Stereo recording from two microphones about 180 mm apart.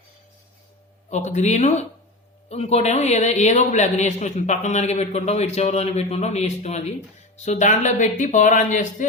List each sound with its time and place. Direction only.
1.1 s a man's voice: 40° left (ahead or behind)